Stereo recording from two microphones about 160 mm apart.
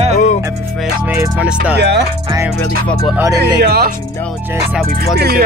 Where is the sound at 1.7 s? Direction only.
90° right.